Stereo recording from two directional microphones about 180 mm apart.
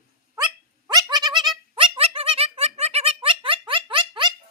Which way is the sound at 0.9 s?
25° right (ahead or behind).